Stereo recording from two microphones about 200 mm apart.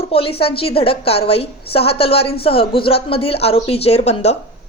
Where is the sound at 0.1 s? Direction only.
30° left (ahead or behind).